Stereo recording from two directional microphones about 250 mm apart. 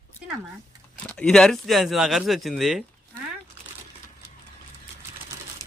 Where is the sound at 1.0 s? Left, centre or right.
Centre.